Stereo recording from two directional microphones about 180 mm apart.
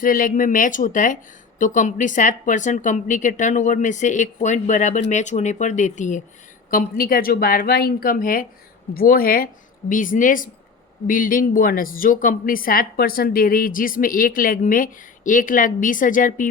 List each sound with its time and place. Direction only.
0.0 s speech: 50° left (ahead or behind)